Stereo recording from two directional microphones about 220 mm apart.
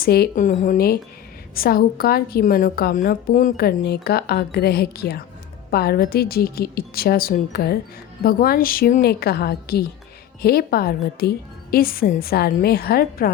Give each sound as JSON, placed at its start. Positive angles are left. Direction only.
{"t": 0.0, "sound": "a woman's voice", "side_deg": 45}